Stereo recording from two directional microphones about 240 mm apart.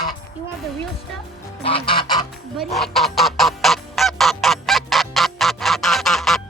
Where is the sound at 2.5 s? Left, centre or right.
Centre.